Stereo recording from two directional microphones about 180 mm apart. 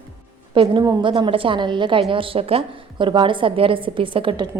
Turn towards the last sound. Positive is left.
turn(degrees=-30)  # may be behind; listen again after turning